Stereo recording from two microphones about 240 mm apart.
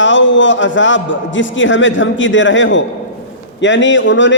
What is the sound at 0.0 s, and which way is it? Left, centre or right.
A man's voice, left.